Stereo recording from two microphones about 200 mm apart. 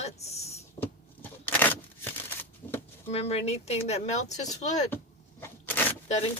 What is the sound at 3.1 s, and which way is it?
A woman's voice, 30° left (ahead or behind).